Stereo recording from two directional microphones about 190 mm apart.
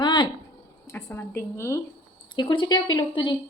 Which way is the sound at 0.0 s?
25° left (ahead or behind).